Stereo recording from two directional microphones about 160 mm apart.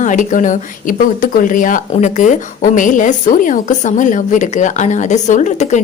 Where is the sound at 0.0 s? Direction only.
55° left (ahead or behind).